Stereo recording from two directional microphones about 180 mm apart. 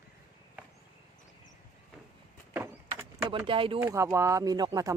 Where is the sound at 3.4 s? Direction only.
30° right (ahead or behind).